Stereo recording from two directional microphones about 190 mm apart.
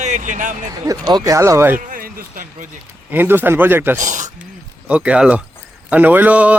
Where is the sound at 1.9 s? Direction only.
45° right (ahead or behind).